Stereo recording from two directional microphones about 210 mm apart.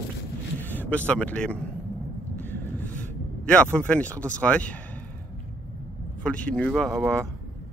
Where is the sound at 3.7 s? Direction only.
5° left (ahead or behind).